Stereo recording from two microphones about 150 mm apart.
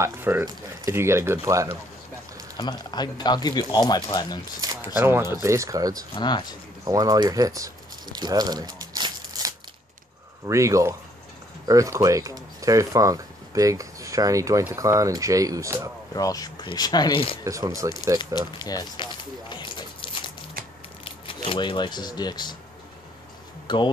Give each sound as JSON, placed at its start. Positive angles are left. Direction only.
{"t": 0.0, "sound": "speech", "side_deg": -15}
{"t": 2.5, "sound": "speech", "side_deg": 30}
{"t": 4.8, "sound": "speech", "side_deg": -15}
{"t": 6.1, "sound": "speech", "side_deg": 30}
{"t": 6.8, "sound": "a sound", "side_deg": -25}
{"t": 10.4, "sound": "speech", "side_deg": -20}
{"t": 16.2, "sound": "speech", "side_deg": 25}
{"t": 17.5, "sound": "speech", "side_deg": -20}
{"t": 18.2, "sound": "speech", "side_deg": 25}
{"t": 19.5, "sound": "a sound", "side_deg": 35}
{"t": 20.6, "sound": "a sound", "side_deg": -75}
{"t": 21.0, "sound": "speech", "side_deg": 35}
{"t": 23.7, "sound": "speech", "side_deg": 30}